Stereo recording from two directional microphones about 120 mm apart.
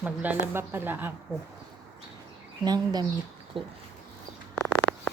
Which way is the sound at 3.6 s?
45° right (ahead or behind).